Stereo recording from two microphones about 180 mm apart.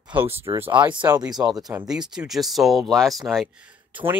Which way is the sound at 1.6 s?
5° right (ahead or behind).